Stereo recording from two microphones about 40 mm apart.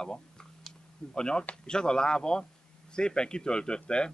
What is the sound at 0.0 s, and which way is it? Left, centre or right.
Speech, centre.